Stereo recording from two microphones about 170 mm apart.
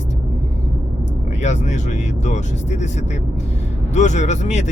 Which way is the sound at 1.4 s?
45° left (ahead or behind).